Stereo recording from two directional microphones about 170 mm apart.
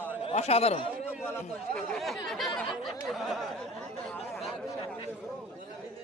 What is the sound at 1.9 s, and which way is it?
Speech, centre (ahead or behind).